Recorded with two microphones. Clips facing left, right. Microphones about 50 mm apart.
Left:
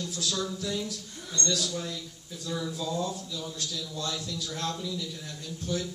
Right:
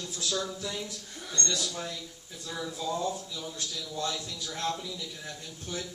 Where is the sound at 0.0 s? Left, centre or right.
Right.